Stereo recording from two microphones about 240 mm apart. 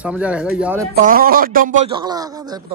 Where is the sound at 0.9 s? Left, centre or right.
Right.